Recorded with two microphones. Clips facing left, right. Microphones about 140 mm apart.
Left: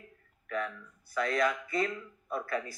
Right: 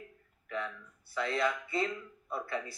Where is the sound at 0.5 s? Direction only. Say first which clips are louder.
Left 3 dB; 25° right (ahead or behind).